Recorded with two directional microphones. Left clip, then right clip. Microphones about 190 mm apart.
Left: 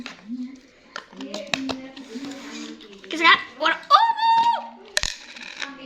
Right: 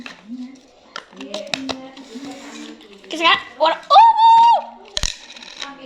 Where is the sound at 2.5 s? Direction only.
20° left (ahead or behind).